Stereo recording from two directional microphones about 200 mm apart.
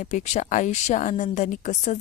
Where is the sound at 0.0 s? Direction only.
35° left (ahead or behind).